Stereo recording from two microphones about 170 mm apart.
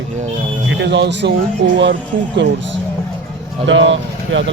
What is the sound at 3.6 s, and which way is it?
Speech, 90° right.